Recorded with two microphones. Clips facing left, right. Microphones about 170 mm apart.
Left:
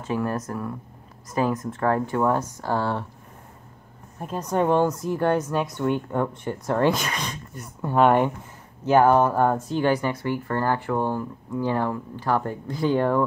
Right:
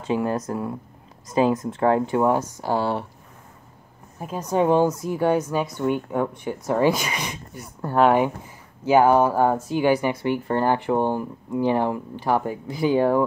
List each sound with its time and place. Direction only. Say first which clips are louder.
0.0 s speech: right 3 dB; 20° right (ahead or behind)
4.2 s speech: right 2 dB; 5° right (ahead or behind)